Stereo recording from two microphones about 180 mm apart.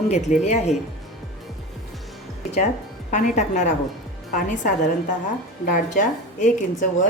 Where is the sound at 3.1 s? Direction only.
40° left (ahead or behind).